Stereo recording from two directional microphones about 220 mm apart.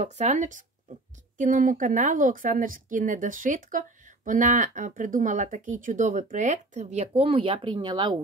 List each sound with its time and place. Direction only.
0.0 s speech: 35° right (ahead or behind)